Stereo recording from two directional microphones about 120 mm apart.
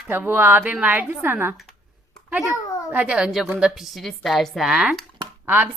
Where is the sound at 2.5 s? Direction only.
25° left (ahead or behind).